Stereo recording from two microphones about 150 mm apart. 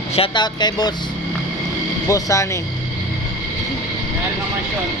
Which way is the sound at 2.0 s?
20° left (ahead or behind).